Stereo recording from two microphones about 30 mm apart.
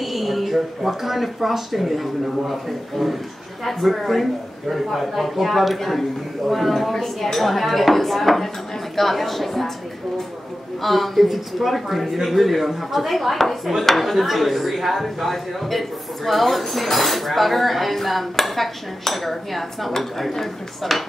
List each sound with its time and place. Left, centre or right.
0.0 s speech: centre
6.7 s a woman's voice: centre
10.8 s speech: centre
11.2 s speech: centre